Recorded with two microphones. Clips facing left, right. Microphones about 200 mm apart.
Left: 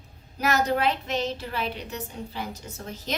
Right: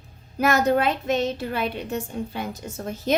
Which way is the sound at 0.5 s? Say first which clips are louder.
Right 2 dB; 50° right (ahead or behind).